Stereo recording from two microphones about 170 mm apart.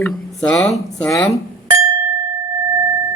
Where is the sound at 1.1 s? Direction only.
15° left (ahead or behind).